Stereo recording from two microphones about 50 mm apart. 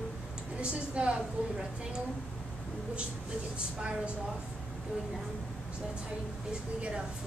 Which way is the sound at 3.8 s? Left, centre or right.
Right.